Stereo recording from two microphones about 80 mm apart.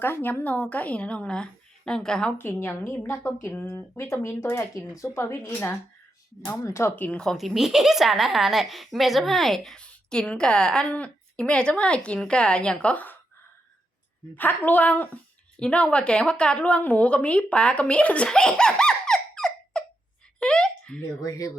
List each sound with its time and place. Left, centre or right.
0.0 s a woman's voice: left; by 2.3 s centre
2.4 s a woman's voice: left
6.5 s speech: left
6.9 s a woman's voice: left
7.2 s a woman's voice: centre
14.3 s speech: left
20.4 s a sound: centre
21.2 s speech: left